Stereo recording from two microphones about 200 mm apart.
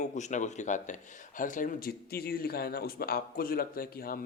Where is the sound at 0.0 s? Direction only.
35° left (ahead or behind).